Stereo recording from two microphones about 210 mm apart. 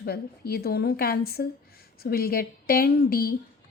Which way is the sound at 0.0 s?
50° left (ahead or behind).